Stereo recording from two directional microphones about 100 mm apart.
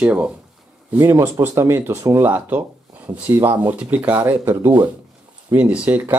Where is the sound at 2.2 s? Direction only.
15° right (ahead or behind).